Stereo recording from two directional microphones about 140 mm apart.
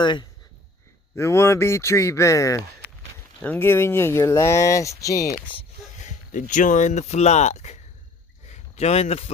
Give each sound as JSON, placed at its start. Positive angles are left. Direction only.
{"t": 0.0, "sound": "speech", "side_deg": 35}
{"t": 1.1, "sound": "speech", "side_deg": 20}
{"t": 6.1, "sound": "speech", "side_deg": 65}
{"t": 8.4, "sound": "a sound", "side_deg": 50}